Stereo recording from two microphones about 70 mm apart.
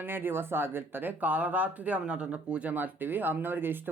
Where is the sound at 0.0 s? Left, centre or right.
Right.